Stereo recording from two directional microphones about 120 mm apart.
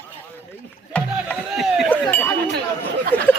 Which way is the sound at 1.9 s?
15° left (ahead or behind).